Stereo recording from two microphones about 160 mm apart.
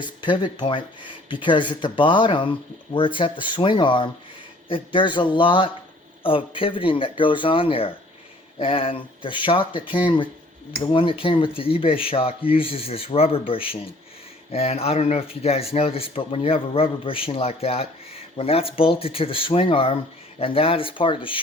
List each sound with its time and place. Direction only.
0.0 s speech: 30° left (ahead or behind)
10.8 s speech: 35° left (ahead or behind)